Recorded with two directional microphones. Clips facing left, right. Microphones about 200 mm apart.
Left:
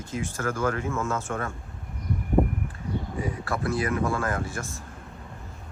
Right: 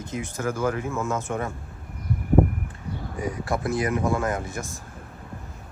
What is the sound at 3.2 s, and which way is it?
Speech, 20° right (ahead or behind).